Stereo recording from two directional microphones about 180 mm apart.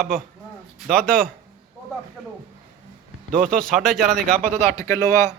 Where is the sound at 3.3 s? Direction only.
50° right (ahead or behind).